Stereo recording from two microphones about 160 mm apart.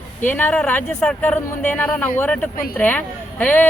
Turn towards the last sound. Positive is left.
turn(degrees=10)  # may be behind; listen again after turning